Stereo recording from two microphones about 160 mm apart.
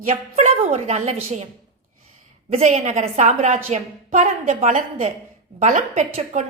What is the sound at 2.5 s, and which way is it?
A woman's voice, 45° right (ahead or behind).